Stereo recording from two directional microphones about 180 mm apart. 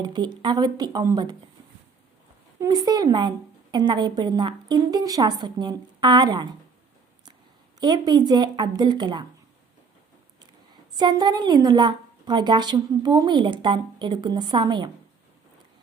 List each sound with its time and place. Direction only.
0.0 s a woman's voice: 25° right (ahead or behind)
2.6 s a woman's voice: 20° right (ahead or behind)
7.8 s a woman's voice: 25° right (ahead or behind)
10.9 s a woman's voice: 25° right (ahead or behind)